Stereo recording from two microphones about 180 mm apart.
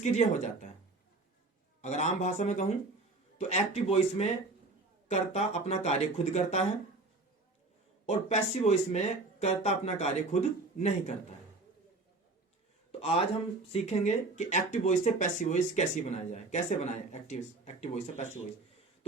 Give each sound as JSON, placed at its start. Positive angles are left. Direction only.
{"t": 0.0, "sound": "speech", "side_deg": 40}
{"t": 1.8, "sound": "speech", "side_deg": 40}
{"t": 8.0, "sound": "speech", "side_deg": 40}
{"t": 13.0, "sound": "speech", "side_deg": 35}